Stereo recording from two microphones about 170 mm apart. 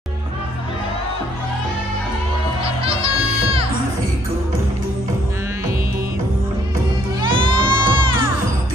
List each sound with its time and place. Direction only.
2.6 s music: 35° right (ahead or behind)
7.2 s music: 30° right (ahead or behind)